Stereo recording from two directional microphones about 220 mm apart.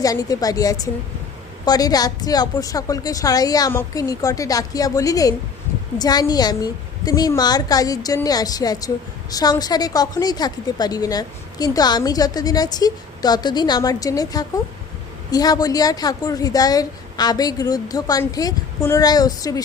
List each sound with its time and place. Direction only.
0.0 s speech: 15° left (ahead or behind)